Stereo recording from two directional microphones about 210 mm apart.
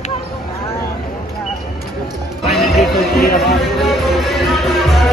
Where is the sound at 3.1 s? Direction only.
45° left (ahead or behind).